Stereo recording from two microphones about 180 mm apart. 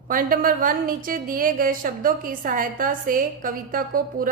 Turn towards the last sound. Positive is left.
turn(degrees=-50)  # may be behind; listen again after turning